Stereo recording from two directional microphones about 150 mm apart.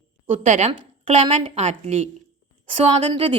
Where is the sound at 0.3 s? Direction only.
55° right (ahead or behind).